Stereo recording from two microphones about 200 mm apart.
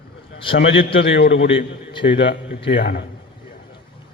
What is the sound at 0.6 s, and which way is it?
A man's voice, 65° left (ahead or behind).